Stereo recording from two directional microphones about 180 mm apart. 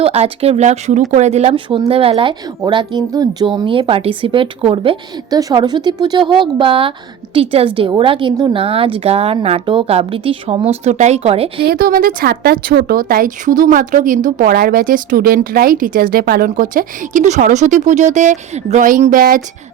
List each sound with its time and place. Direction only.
0.0 s a woman's voice: 35° right (ahead or behind)
11.6 s a woman's voice: 55° right (ahead or behind)